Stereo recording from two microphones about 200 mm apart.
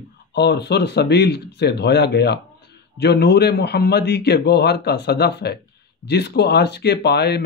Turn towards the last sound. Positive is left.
turn(degrees=55)  # may be behind; listen again after turning